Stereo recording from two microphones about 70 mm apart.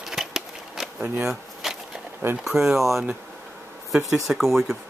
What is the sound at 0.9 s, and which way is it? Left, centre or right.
Speech, right.